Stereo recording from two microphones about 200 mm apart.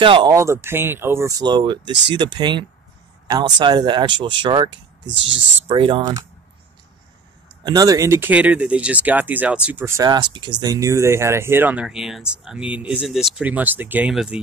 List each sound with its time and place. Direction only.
0.0 s speech: 25° right (ahead or behind)
5.0 s speech: 65° right (ahead or behind)
5.7 s speech: 25° right (ahead or behind)
7.6 s speech: 20° right (ahead or behind)